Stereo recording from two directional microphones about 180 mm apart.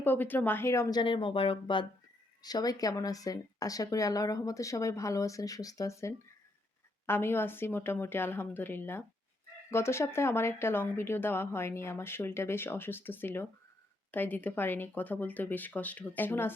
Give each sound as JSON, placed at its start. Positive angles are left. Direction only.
{"t": 0.0, "sound": "speech", "side_deg": 10}